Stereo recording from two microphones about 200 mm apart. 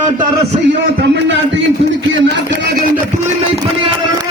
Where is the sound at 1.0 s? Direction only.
60° right (ahead or behind).